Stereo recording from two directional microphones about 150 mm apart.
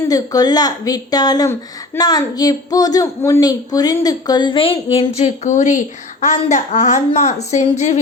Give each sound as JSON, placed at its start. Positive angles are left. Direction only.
{"t": 0.1, "sound": "a woman's voice", "side_deg": 25}